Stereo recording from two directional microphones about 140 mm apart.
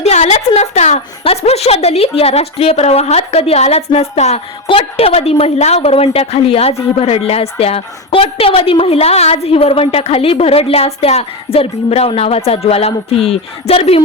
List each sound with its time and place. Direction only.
0.0 s a woman's voice: 50° left (ahead or behind)